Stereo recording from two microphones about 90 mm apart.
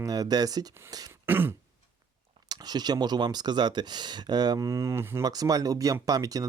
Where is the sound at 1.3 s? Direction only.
25° right (ahead or behind).